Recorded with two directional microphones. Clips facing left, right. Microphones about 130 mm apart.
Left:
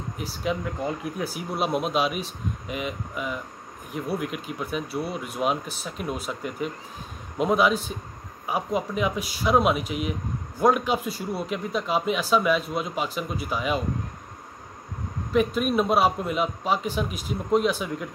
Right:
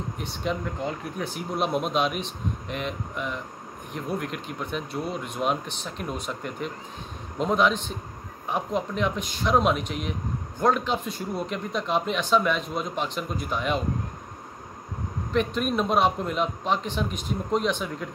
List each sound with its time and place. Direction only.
0.2 s a man's voice: 5° left (ahead or behind)
15.3 s speech: 5° left (ahead or behind)